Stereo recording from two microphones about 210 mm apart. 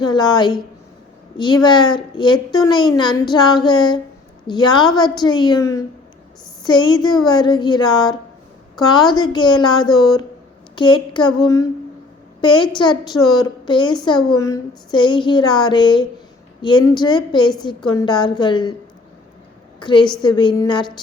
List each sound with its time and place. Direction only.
0.0 s a woman's voice: 20° left (ahead or behind)
19.8 s a woman's voice: 20° left (ahead or behind)